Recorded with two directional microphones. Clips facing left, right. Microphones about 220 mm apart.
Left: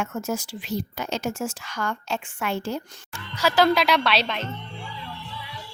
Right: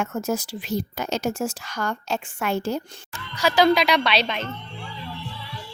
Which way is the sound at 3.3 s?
5° left (ahead or behind).